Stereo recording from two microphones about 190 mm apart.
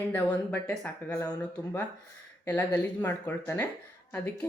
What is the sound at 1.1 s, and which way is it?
Speech, 15° left (ahead or behind).